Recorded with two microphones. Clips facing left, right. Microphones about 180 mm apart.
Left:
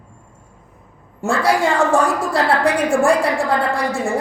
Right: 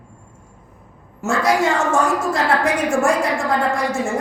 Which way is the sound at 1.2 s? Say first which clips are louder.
Left 1 dB; 30° left (ahead or behind).